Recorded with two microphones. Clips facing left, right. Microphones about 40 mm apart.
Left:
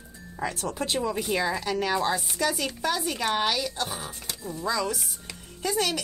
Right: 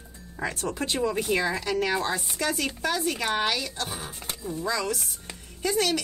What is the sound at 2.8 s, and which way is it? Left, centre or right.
Speech, centre.